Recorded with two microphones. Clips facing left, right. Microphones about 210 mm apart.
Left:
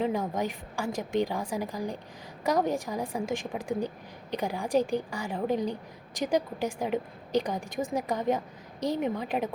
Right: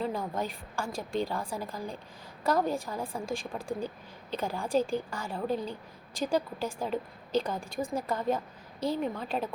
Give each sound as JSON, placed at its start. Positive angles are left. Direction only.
{"t": 0.0, "sound": "a woman's voice", "side_deg": 15}